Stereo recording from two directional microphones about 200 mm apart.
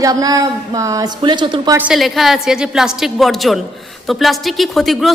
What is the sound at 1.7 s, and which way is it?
Speech, 5° right (ahead or behind).